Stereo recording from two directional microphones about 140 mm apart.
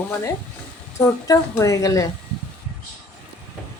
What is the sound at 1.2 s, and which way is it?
Frying, 20° left (ahead or behind).